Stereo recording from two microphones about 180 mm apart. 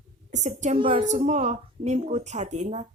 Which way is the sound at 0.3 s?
40° right (ahead or behind).